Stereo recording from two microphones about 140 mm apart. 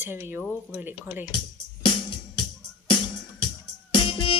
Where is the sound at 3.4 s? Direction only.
40° left (ahead or behind).